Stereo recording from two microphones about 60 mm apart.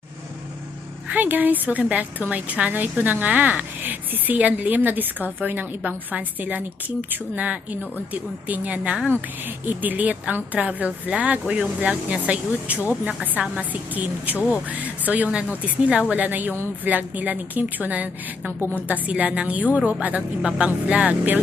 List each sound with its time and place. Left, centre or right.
1.0 s a woman's voice: right